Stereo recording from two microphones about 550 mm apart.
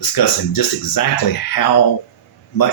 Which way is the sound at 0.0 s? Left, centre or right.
Left.